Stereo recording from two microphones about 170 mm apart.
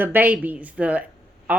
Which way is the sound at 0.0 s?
10° right (ahead or behind).